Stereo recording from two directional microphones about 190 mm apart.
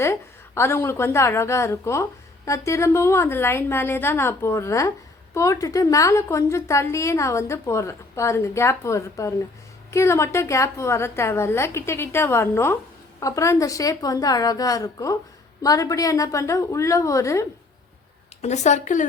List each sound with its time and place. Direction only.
0.0 s a woman's voice: 15° left (ahead or behind)
18.4 s speech: 40° left (ahead or behind)